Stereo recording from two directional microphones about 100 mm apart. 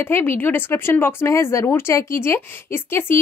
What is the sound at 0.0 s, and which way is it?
Speech, 20° left (ahead or behind).